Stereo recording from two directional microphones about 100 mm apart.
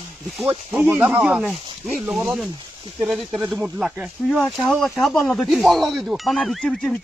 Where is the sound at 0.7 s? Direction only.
15° right (ahead or behind); by 7.0 s 5° left (ahead or behind).